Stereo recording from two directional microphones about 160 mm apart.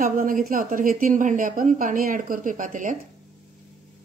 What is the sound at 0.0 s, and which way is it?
Speech, 55° right (ahead or behind).